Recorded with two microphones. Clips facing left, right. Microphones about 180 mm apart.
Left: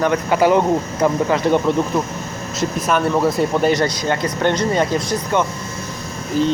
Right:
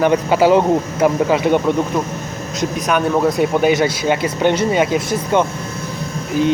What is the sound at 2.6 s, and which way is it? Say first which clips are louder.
Speech: right 1 dB; centre (ahead or behind).